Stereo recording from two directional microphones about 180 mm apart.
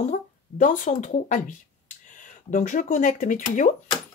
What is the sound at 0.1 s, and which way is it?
Speech, 45° left (ahead or behind).